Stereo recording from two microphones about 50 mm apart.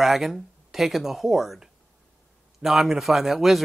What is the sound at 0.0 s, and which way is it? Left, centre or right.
Speech, centre.